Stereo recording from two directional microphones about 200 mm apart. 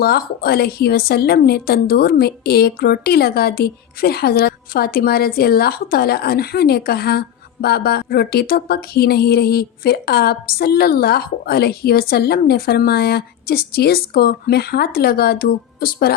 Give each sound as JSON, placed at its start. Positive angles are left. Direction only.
{"t": 0.0, "sound": "a woman's voice", "side_deg": 50}